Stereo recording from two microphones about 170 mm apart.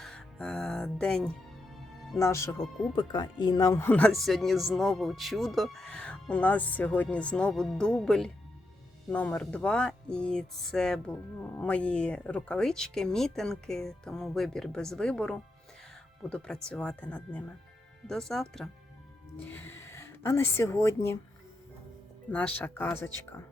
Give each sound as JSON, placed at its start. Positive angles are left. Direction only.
{"t": 0.0, "sound": "music", "side_deg": 5}
{"t": 2.1, "sound": "speech", "side_deg": 15}
{"t": 2.9, "sound": "speech", "side_deg": 25}
{"t": 22.3, "sound": "speech", "side_deg": 10}